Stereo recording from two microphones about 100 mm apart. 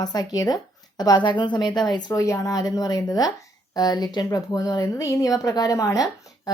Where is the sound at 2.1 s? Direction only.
35° left (ahead or behind).